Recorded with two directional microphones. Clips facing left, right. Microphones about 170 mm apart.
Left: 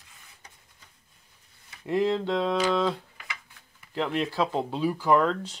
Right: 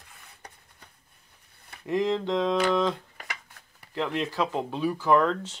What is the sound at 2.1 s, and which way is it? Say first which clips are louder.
Speech: even; 5° left (ahead or behind).